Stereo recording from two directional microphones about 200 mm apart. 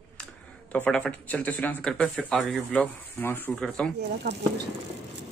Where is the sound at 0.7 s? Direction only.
5° left (ahead or behind).